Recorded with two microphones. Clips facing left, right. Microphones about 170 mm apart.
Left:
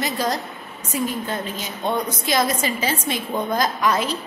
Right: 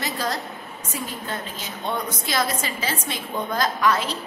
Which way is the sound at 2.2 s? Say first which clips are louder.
Left 5 dB; 15° left (ahead or behind).